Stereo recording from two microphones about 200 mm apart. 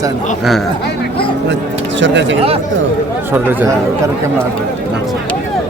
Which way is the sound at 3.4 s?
10° right (ahead or behind).